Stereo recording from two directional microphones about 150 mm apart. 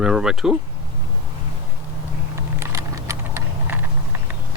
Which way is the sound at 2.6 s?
20° right (ahead or behind).